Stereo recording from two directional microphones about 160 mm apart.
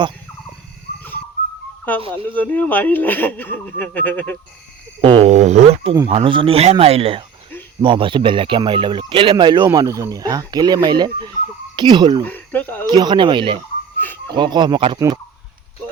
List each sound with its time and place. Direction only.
2.3 s speech: 10° left (ahead or behind)
4.9 s speech: 35° right (ahead or behind)
5.3 s speech: 45° right (ahead or behind); by 12.2 s 30° right (ahead or behind)
12.2 s speech: 10° left (ahead or behind)
12.9 s speech: 30° right (ahead or behind)